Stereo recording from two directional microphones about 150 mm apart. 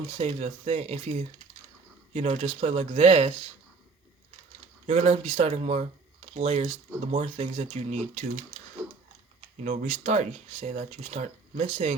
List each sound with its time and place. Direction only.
0.2 s speech: 45° right (ahead or behind)
4.9 s speech: 45° right (ahead or behind)
8.8 s a sound: 15° right (ahead or behind)
9.6 s speech: 55° right (ahead or behind)